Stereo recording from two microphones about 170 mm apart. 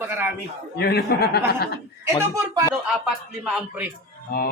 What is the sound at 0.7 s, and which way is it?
Speech, 70° left (ahead or behind).